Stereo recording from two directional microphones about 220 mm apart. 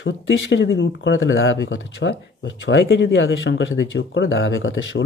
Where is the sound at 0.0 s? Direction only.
60° left (ahead or behind).